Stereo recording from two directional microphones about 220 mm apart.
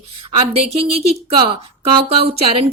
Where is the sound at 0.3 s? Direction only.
25° right (ahead or behind).